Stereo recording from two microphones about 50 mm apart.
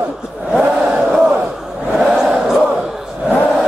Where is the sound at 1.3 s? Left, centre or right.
Centre.